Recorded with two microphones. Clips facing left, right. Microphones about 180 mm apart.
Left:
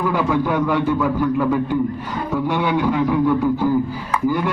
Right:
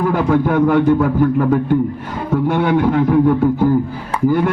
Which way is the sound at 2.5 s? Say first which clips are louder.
Right 5 dB; 55° right (ahead or behind).